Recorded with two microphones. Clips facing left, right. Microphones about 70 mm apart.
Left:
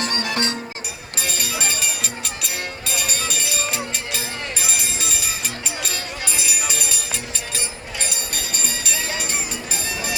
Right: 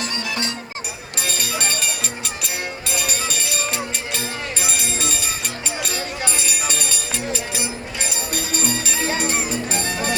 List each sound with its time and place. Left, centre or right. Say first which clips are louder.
0.0 s music: left 2 dB; left
1.2 s music: right 1 dB; centre
7.5 s music: right 3 dB; centre
9.1 s music: right 5 dB; right